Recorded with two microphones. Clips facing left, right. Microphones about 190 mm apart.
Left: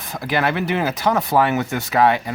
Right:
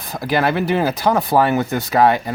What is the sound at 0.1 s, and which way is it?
Speech, 40° right (ahead or behind).